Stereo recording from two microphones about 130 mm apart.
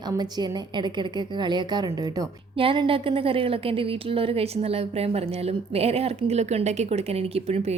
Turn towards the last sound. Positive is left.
turn(degrees=-50)  # may be behind; listen again after turning